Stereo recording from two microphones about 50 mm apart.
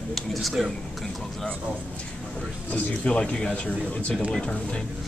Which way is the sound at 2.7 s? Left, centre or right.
Left.